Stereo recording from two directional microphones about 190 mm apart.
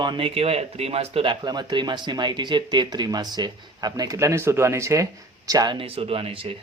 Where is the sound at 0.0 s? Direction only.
25° right (ahead or behind).